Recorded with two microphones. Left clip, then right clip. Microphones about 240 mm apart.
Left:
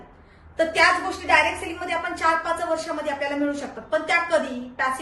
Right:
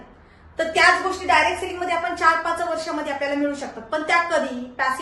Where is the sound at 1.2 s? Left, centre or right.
Centre.